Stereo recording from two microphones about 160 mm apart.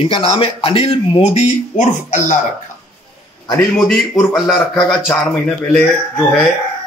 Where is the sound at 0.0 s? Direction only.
35° left (ahead or behind); by 2.3 s 50° left (ahead or behind).